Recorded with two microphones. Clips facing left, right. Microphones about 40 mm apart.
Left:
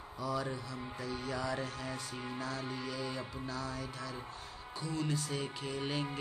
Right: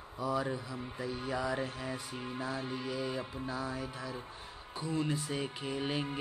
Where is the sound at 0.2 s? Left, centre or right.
Centre.